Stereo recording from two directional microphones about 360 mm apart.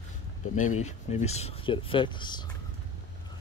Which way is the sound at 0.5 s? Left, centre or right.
Centre.